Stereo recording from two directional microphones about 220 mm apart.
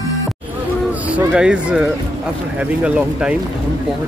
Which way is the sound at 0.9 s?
5° right (ahead or behind).